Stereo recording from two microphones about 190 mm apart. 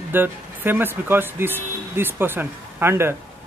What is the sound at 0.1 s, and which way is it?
Speech, 10° right (ahead or behind).